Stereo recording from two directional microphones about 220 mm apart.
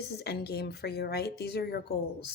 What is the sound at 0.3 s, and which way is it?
Speech, 45° left (ahead or behind).